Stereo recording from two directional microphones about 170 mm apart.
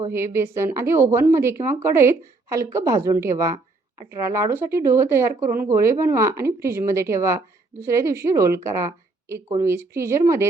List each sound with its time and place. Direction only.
0.0 s a woman's voice: 15° right (ahead or behind)